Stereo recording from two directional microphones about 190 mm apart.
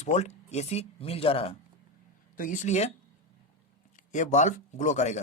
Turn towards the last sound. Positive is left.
turn(degrees=40)  # may be behind; listen again after turning